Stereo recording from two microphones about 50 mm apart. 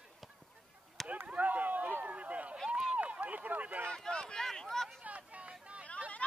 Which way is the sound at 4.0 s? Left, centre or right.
Centre.